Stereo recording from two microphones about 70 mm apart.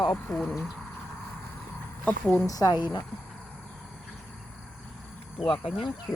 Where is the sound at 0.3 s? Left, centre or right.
Centre.